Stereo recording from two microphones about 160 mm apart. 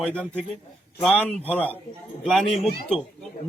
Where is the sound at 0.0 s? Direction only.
5° left (ahead or behind).